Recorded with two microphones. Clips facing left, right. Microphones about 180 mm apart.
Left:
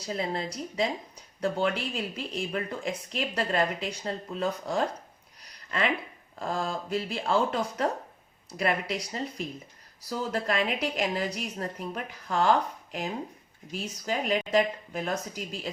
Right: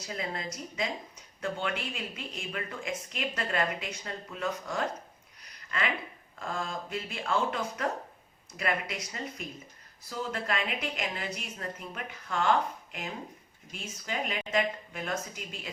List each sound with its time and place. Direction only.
0.0 s speech: 35° left (ahead or behind)
6.4 s speech: 35° left (ahead or behind)